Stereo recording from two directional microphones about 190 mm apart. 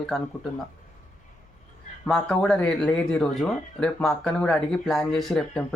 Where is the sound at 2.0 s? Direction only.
Centre (ahead or behind).